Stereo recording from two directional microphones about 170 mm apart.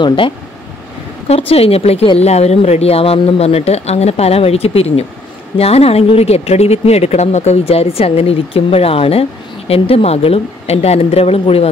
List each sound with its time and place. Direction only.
0.0 s speech: 30° left (ahead or behind)